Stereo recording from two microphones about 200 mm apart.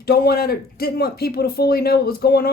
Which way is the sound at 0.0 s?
50° left (ahead or behind).